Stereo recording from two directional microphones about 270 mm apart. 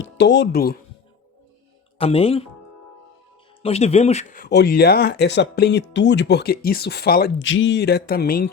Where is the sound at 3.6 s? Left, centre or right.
Left.